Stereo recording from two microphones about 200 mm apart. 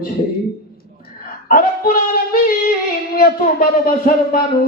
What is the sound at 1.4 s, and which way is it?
A man's voice, 40° left (ahead or behind).